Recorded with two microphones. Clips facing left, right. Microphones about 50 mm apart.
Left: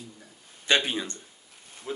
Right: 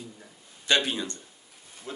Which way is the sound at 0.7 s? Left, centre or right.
Left.